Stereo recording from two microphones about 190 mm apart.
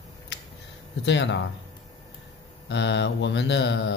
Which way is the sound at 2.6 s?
70° left (ahead or behind).